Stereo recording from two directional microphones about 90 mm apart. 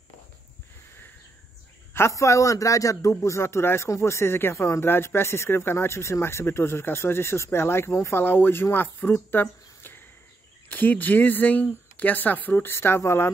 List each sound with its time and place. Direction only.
2.0 s a man's voice: 35° left (ahead or behind)